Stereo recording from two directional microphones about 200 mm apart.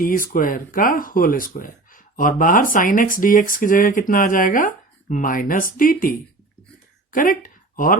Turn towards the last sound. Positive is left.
turn(degrees=45)  # may be behind; listen again after turning